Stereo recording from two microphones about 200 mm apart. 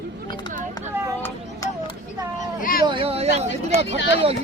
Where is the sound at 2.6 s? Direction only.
45° left (ahead or behind).